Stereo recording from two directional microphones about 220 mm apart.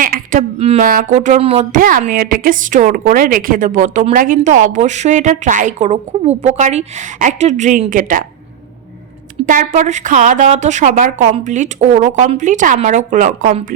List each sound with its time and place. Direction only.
0.0 s speech: 40° right (ahead or behind)
1.8 s speech: 35° right (ahead or behind)
9.5 s speech: 35° right (ahead or behind)